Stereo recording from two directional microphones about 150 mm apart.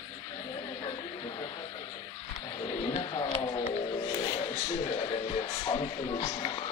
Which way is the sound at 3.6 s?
30° left (ahead or behind).